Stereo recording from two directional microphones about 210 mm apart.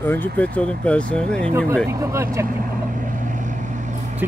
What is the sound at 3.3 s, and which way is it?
Vehicle, 35° right (ahead or behind).